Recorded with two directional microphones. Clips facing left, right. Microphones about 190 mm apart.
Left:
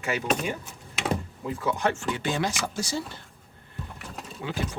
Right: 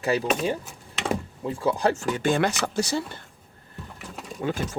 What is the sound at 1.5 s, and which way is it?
Speech, 30° right (ahead or behind).